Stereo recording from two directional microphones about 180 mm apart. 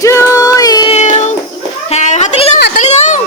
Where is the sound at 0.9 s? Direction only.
40° left (ahead or behind).